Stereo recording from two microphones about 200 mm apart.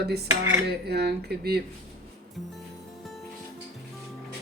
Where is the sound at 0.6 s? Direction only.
55° right (ahead or behind).